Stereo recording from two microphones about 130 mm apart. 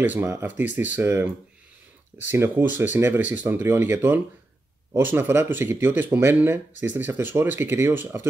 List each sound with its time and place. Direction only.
0.0 s speech: 15° right (ahead or behind)